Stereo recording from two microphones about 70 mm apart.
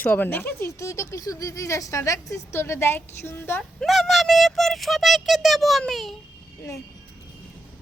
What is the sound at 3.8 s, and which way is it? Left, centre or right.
Speech, centre.